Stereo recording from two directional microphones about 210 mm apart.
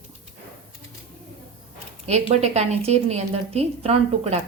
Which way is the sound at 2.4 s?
30° right (ahead or behind).